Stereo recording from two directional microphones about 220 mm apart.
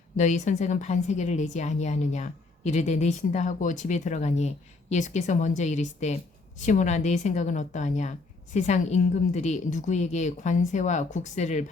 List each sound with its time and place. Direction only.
0.2 s a woman's voice: 35° left (ahead or behind)